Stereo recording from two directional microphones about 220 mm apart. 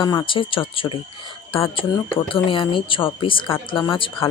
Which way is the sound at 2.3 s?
25° left (ahead or behind).